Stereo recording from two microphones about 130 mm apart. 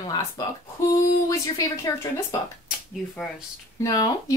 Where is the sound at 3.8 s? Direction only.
30° left (ahead or behind).